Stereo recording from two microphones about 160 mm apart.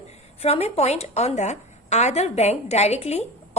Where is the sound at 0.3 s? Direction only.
40° left (ahead or behind).